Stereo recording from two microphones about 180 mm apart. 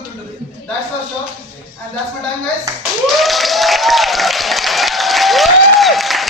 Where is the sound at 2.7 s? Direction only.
20° right (ahead or behind).